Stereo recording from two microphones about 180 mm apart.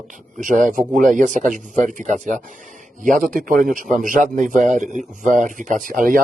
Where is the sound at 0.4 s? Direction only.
50° right (ahead or behind).